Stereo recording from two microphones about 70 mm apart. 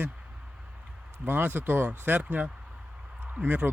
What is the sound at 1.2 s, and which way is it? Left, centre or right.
Speech, right.